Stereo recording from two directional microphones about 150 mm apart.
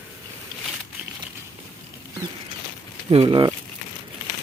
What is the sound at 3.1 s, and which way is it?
Speech, 35° right (ahead or behind).